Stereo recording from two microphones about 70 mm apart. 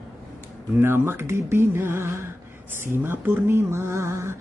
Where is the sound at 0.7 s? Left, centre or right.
Right.